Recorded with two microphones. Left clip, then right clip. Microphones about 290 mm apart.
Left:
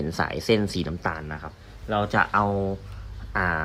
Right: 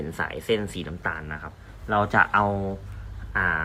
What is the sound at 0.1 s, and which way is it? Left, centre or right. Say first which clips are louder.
Speech: left 2 dB; centre.